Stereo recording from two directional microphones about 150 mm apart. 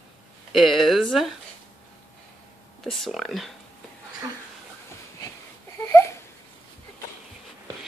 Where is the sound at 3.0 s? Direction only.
Centre (ahead or behind).